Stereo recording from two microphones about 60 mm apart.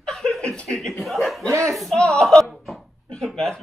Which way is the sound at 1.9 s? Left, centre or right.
Centre.